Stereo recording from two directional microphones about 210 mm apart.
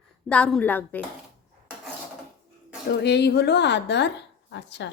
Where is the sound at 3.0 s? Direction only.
50° left (ahead or behind).